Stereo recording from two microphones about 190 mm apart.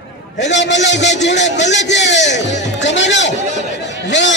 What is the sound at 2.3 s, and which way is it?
Speech, 40° left (ahead or behind).